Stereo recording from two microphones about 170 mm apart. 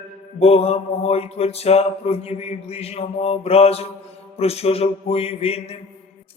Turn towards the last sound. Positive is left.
turn(degrees=35)  # may be behind; listen again after turning